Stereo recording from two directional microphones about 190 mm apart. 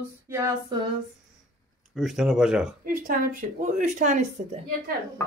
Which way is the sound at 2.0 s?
Centre (ahead or behind).